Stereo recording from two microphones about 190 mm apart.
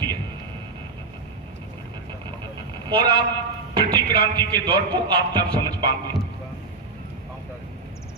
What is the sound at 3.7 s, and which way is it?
Speech, 20° right (ahead or behind).